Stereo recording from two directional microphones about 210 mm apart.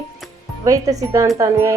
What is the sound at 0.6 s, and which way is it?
Speech, 15° right (ahead or behind).